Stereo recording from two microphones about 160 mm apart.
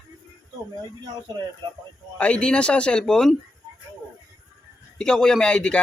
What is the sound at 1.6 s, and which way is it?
Speech, 30° right (ahead or behind).